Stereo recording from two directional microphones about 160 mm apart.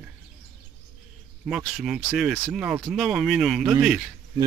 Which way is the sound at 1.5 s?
5° right (ahead or behind).